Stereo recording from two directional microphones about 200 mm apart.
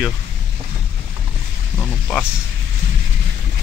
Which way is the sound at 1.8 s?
5° left (ahead or behind).